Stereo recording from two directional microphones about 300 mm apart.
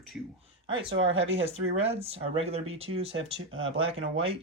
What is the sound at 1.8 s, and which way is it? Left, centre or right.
Speech, centre.